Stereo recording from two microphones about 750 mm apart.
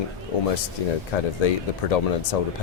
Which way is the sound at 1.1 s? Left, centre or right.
Left.